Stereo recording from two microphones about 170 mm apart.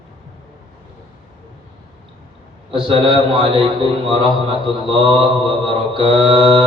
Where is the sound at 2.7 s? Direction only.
30° right (ahead or behind).